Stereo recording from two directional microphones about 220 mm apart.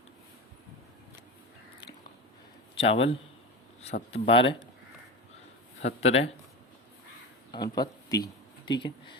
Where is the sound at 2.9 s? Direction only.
25° left (ahead or behind).